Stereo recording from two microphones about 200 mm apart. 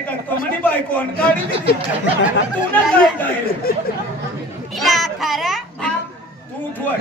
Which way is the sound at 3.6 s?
50° left (ahead or behind).